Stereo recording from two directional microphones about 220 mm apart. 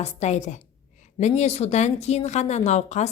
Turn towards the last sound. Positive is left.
turn(degrees=30)  # may be behind; listen again after turning